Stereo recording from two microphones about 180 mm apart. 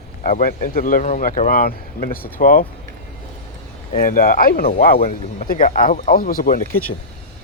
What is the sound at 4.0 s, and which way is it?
Speech, 55° left (ahead or behind).